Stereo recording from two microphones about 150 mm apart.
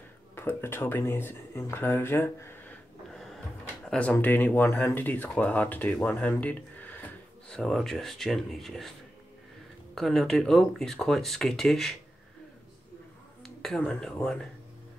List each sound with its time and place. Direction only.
0.4 s speech: 15° left (ahead or behind)
3.1 s a sound: centre (ahead or behind)
4.1 s speech: 10° left (ahead or behind)
9.9 s speech: centre (ahead or behind)
13.4 s speech: 5° left (ahead or behind)